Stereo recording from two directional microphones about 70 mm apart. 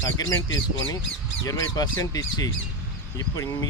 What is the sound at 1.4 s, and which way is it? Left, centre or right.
Speech, left.